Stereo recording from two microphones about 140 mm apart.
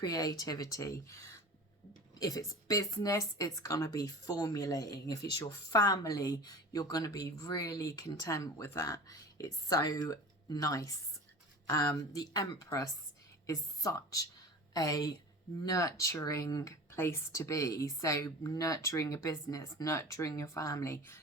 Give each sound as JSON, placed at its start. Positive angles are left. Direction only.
{"t": 0.0, "sound": "a woman's voice", "side_deg": 25}